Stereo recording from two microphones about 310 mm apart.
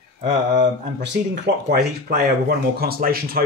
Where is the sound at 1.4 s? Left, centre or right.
Right.